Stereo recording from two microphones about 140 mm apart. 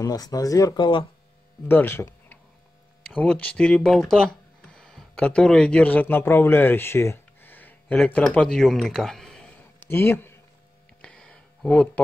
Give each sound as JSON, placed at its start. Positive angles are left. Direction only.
{"t": 0.0, "sound": "speech", "side_deg": 25}
{"t": 1.7, "sound": "speech", "side_deg": 15}
{"t": 9.8, "sound": "speech", "side_deg": 15}
{"t": 11.0, "sound": "a sound", "side_deg": 5}